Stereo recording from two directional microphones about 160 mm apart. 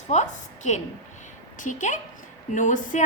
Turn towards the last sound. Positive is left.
turn(degrees=50)  # may be behind; listen again after turning